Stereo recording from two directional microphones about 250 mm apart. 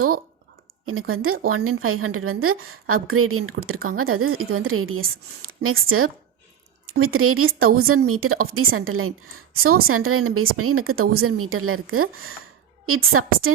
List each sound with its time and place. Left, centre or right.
0.9 s a woman's voice: right